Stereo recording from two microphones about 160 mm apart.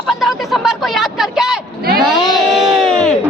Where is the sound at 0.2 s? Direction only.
Centre (ahead or behind).